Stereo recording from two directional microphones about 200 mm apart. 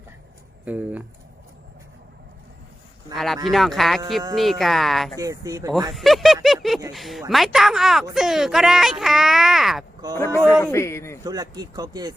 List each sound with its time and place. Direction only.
0.6 s speech: 10° right (ahead or behind)
3.1 s speech: 20° right (ahead or behind)
3.5 s speech: centre (ahead or behind)
5.2 s speech: 15° right (ahead or behind)
5.9 s a sound: centre (ahead or behind)
6.9 s speech: centre (ahead or behind)
10.2 s a man's voice: 10° left (ahead or behind)
11.2 s speech: 20° right (ahead or behind)